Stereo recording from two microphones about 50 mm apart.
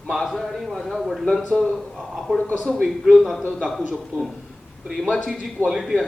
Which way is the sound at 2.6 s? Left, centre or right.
Centre.